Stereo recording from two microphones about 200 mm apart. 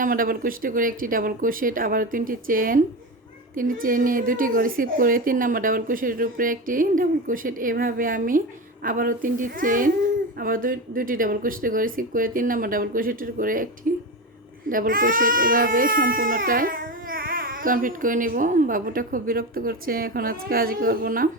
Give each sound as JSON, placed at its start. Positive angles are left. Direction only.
{"t": 0.0, "sound": "speech", "side_deg": -45}
{"t": 13.9, "sound": "a sound", "side_deg": -45}
{"t": 14.7, "sound": "speech", "side_deg": -45}